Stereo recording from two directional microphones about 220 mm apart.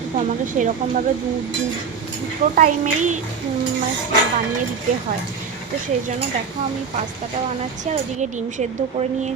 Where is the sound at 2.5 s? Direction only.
35° right (ahead or behind).